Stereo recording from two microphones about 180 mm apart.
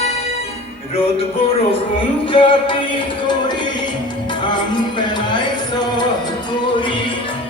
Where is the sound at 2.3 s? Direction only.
30° left (ahead or behind).